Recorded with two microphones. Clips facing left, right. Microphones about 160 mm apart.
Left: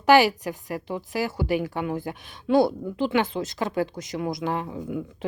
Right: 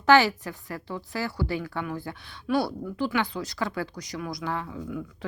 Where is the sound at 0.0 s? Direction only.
15° left (ahead or behind).